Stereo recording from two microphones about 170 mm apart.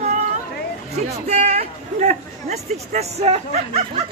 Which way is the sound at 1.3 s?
40° right (ahead or behind).